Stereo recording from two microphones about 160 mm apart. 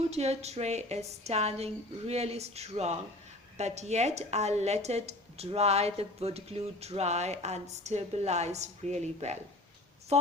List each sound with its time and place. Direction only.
0.1 s a woman's voice: 40° right (ahead or behind)